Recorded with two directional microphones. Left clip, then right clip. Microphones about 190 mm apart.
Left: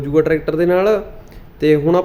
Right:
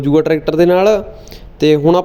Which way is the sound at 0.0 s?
25° right (ahead or behind).